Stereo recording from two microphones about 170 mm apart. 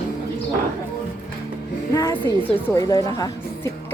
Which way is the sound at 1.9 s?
20° left (ahead or behind).